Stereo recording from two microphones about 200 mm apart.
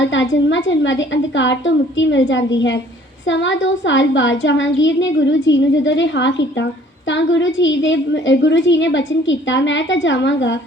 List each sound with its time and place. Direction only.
0.0 s a woman's voice: 65° left (ahead or behind)